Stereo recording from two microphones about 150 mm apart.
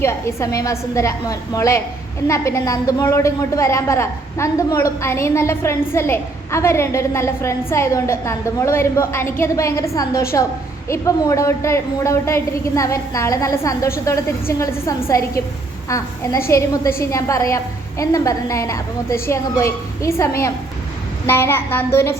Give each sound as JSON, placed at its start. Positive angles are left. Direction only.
{"t": 0.0, "sound": "a woman's voice", "side_deg": 20}